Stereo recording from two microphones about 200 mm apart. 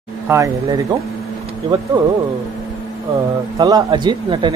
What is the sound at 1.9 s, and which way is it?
Speech, 15° right (ahead or behind).